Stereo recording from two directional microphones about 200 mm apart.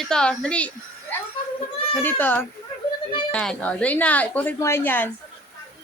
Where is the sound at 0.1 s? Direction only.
5° left (ahead or behind).